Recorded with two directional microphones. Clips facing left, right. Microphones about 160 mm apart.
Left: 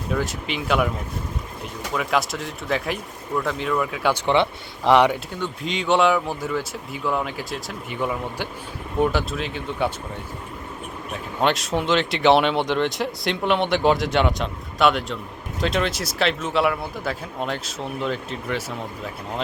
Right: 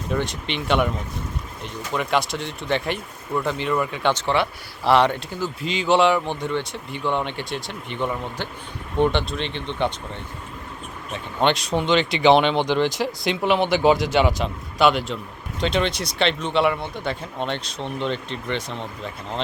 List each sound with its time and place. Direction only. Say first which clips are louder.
0.1 s speech: even; 5° left (ahead or behind)
4.3 s speech: left 2 dB; 15° left (ahead or behind)
5.3 s speech: right 1 dB; centre (ahead or behind)
11.1 s speech: right 1 dB; centre (ahead or behind)